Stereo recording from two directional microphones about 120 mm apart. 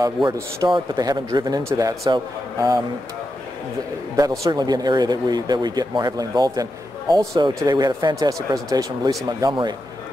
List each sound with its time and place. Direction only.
0.0 s speech: 35° right (ahead or behind)
4.5 s speech: 35° right (ahead or behind)